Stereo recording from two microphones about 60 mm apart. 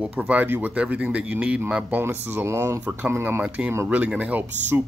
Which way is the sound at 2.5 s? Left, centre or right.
Right.